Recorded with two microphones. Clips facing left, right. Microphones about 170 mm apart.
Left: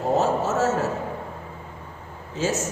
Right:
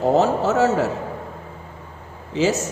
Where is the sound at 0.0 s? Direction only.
70° right (ahead or behind).